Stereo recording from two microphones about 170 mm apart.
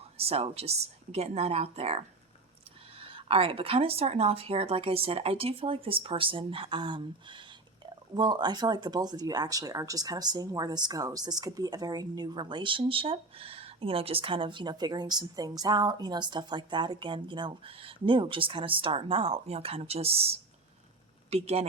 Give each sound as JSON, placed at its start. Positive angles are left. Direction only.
{"t": 0.2, "sound": "speech", "side_deg": -35}